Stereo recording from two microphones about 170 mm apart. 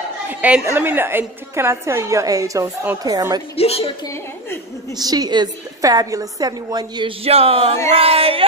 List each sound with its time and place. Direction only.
0.3 s a woman's voice: 10° right (ahead or behind)
3.5 s a woman's voice: 35° left (ahead or behind)
4.9 s a woman's voice: 25° right (ahead or behind)
7.2 s a sound: 35° right (ahead or behind)